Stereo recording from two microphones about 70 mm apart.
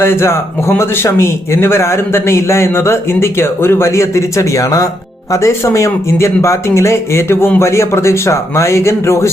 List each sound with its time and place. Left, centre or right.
0.0 s speech: left
5.3 s speech: left